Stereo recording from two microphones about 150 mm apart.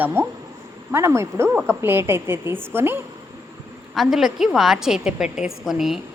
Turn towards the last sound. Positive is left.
turn(degrees=0)  # may be behind; listen again after turning